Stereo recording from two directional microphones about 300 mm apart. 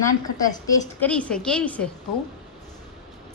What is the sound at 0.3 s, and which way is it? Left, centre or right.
A woman's voice, centre.